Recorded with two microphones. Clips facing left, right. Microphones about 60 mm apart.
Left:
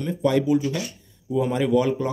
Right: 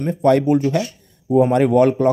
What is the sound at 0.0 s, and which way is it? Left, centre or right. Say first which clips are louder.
Speech: right 6 dB; right.